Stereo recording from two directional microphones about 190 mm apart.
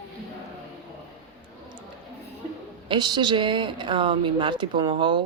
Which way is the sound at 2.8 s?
25° right (ahead or behind).